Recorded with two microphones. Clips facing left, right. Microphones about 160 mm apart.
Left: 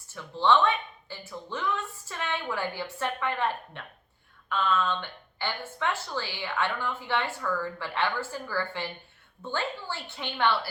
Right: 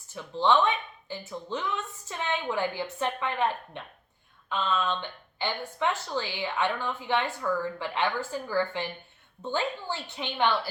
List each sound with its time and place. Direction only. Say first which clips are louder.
0.1 s a woman's voice: even; 15° right (ahead or behind)